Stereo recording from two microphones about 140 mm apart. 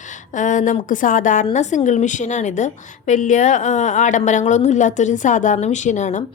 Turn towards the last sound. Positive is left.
turn(degrees=60)  # may be behind; listen again after turning